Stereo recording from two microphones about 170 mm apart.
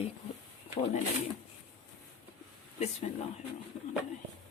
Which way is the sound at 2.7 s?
40° left (ahead or behind).